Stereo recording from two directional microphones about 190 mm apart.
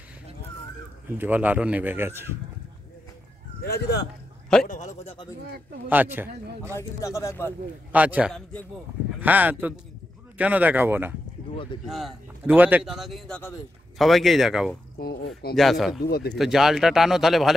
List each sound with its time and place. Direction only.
1.0 s a man's voice: 10° right (ahead or behind)
3.6 s speech: 60° left (ahead or behind)
4.6 s a sound: 40° left (ahead or behind)
5.9 s a man's voice: 10° right (ahead or behind)
6.7 s speech: 15° left (ahead or behind)
7.9 s a man's voice: 5° right (ahead or behind)
11.5 s speech: 25° left (ahead or behind)
11.8 s a man's voice: centre (ahead or behind)
16.0 s speech: 55° left (ahead or behind)
16.3 s a man's voice: centre (ahead or behind)